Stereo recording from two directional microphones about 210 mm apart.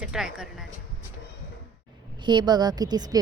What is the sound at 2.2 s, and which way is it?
Speech, 20° right (ahead or behind).